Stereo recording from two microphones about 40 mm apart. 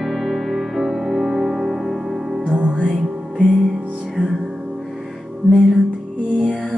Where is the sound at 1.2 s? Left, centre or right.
Centre.